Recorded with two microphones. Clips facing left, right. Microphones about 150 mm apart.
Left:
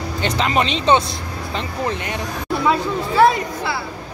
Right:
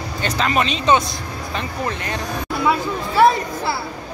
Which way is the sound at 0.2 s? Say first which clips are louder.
Left 1 dB; 25° left (ahead or behind).